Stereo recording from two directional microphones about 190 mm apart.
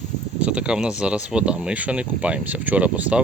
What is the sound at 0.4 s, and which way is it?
Speech, 5° right (ahead or behind).